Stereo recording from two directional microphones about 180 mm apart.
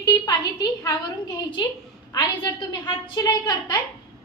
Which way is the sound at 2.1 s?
25° left (ahead or behind).